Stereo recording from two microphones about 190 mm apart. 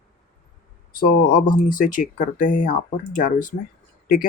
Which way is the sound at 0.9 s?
50° left (ahead or behind).